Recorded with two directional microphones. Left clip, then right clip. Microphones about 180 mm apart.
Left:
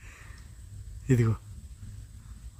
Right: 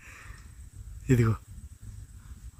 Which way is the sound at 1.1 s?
5° right (ahead or behind).